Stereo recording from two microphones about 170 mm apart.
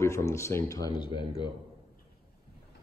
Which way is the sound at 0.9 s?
30° left (ahead or behind).